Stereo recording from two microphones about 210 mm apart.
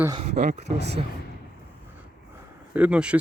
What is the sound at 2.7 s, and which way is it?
Speech, 5° right (ahead or behind).